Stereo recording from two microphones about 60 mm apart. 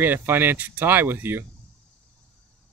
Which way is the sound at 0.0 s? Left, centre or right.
Right.